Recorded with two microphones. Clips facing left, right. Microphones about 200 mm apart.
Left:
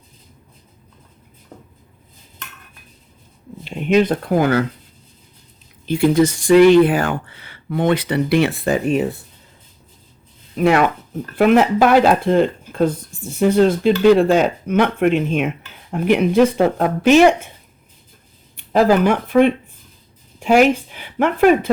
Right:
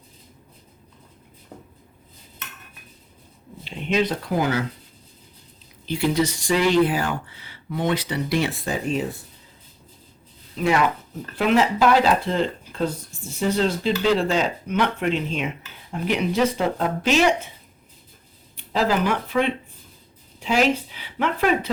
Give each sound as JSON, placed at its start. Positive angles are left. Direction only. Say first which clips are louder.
{"t": 1.5, "sound": "a sound", "louder": "left 1 dB", "side_deg": -10}
{"t": 3.6, "sound": "speech", "louder": "left 7 dB", "side_deg": 50}
{"t": 5.8, "sound": "speech", "louder": "left 7 dB", "side_deg": 50}
{"t": 10.5, "sound": "speech", "louder": "left 6 dB", "side_deg": 60}
{"t": 18.5, "sound": "speech", "louder": "left 8 dB", "side_deg": 55}